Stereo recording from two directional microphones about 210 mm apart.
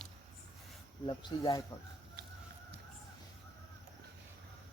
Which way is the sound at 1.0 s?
20° left (ahead or behind).